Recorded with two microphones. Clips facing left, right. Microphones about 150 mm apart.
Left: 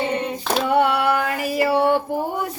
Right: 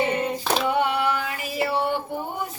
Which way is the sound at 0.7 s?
55° left (ahead or behind).